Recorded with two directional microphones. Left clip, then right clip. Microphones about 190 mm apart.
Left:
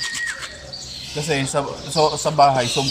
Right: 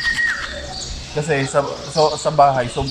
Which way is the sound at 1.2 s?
30° left (ahead or behind).